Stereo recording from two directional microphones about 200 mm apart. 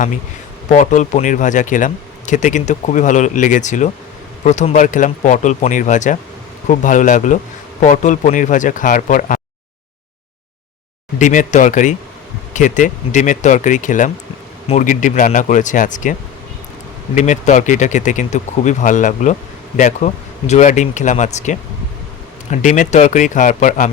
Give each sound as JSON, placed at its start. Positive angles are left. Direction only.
{"t": 0.7, "sound": "speech", "side_deg": 40}
{"t": 11.2, "sound": "speech", "side_deg": 40}
{"t": 17.2, "sound": "speech", "side_deg": 35}
{"t": 22.6, "sound": "speech", "side_deg": 40}